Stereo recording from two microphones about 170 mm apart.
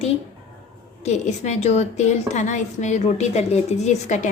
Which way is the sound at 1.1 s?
40° left (ahead or behind).